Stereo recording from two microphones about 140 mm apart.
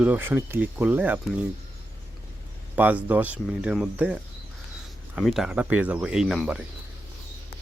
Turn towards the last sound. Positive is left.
turn(degrees=-5)  # may be behind; listen again after turning